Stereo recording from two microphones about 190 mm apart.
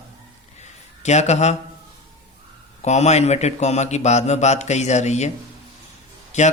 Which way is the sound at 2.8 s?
35° left (ahead or behind).